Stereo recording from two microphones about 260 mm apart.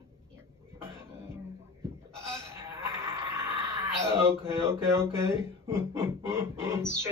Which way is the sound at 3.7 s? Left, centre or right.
Centre.